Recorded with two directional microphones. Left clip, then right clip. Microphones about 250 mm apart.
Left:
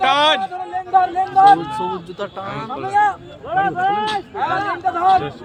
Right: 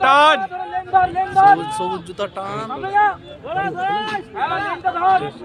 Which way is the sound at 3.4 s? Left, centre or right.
Right.